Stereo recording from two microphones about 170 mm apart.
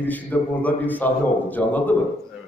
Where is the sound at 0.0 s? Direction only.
10° left (ahead or behind).